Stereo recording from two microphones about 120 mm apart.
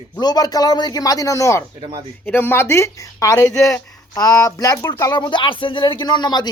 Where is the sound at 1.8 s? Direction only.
45° right (ahead or behind).